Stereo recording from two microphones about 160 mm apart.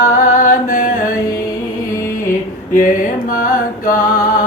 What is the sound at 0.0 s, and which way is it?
Music, 55° left (ahead or behind).